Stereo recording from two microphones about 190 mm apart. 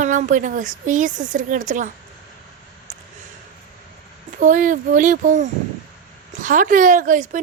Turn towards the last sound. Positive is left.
turn(degrees=-40)  # may be behind; listen again after turning